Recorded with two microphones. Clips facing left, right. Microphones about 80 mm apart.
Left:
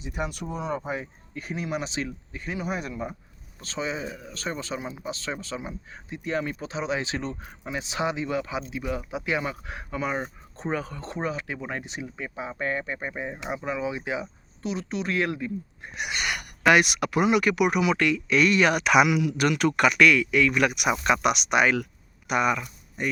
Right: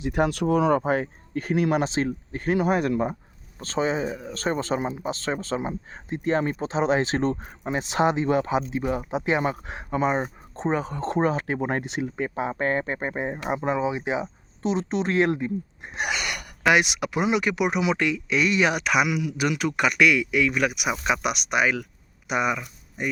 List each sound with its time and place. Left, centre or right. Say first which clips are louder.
0.0 s speech: right 9 dB; right
3.6 s speech: right 6 dB; right
11.1 s speech: right 7 dB; right; by 18.8 s centre
18.8 s speech: left 3 dB; centre
22.3 s speech: left 1 dB; centre